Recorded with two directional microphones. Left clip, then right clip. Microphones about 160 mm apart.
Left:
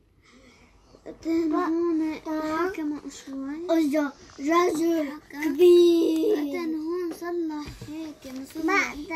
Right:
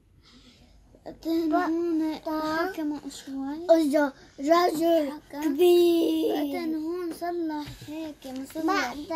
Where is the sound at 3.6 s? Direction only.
20° right (ahead or behind).